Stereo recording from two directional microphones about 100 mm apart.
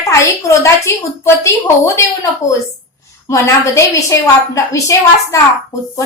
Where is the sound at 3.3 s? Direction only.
30° left (ahead or behind).